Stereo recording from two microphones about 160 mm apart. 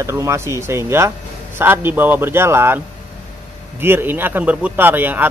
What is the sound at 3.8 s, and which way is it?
Speech, 15° right (ahead or behind).